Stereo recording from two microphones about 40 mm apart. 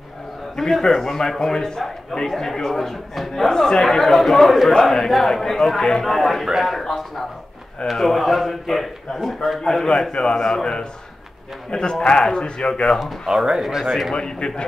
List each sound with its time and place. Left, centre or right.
0.6 s a man's voice: centre
9.6 s a man's voice: centre
13.6 s a man's voice: centre
14.1 s speech: left